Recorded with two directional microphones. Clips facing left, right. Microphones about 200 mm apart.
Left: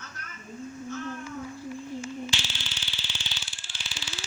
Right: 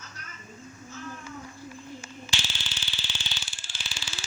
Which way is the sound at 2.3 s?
45° right (ahead or behind).